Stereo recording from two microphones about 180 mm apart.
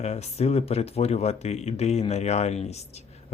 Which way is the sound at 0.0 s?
35° left (ahead or behind).